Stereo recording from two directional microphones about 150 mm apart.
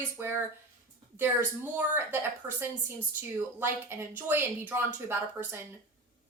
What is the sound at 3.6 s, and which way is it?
A woman's voice, 15° right (ahead or behind).